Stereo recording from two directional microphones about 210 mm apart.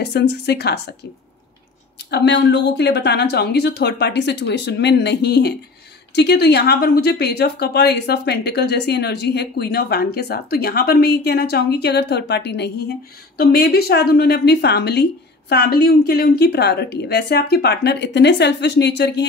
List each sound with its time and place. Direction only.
0.0 s a woman's voice: 50° left (ahead or behind)
2.0 s a woman's voice: 55° left (ahead or behind)